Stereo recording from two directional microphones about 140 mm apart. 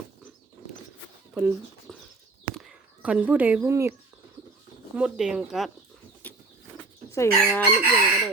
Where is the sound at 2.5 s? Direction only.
5° right (ahead or behind); by 4.0 s 20° right (ahead or behind).